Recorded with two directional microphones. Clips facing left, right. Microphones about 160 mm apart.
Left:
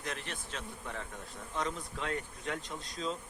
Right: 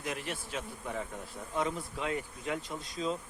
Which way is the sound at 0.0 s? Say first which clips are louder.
Right 4 dB; 10° right (ahead or behind).